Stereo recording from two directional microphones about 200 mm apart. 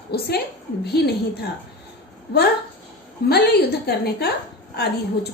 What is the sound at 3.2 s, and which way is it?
A woman's voice, 55° left (ahead or behind).